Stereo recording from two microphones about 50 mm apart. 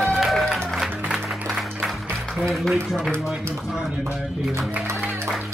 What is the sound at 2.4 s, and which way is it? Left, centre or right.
Speech, centre.